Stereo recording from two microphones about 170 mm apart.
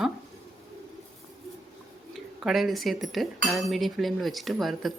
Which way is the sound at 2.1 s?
Centre (ahead or behind).